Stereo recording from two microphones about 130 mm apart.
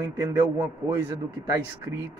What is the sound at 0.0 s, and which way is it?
A man's voice, 25° right (ahead or behind).